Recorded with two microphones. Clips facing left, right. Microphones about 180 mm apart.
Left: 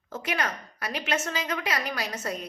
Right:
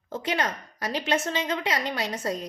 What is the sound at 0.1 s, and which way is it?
A woman's voice, 30° right (ahead or behind).